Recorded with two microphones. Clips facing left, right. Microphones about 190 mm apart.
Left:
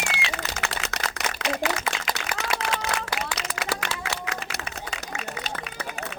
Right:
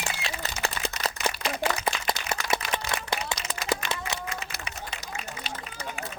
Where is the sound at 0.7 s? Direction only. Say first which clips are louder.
Even; 70° left (ahead or behind).